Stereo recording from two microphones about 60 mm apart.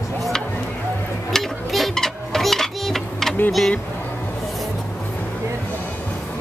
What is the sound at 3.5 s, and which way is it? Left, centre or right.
Speech, centre.